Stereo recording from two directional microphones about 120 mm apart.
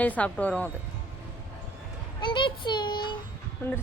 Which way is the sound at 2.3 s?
40° left (ahead or behind).